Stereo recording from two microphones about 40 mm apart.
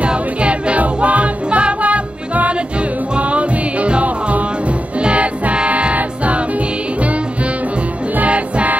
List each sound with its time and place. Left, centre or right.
0.0 s music: right
8.2 s music: right